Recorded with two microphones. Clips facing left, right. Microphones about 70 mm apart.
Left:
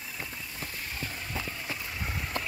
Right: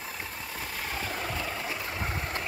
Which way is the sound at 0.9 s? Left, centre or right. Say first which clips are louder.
Right 8 dB; right.